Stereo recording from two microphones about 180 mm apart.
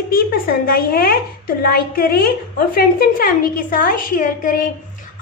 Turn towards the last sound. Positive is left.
turn(degrees=50)  # may be behind; listen again after turning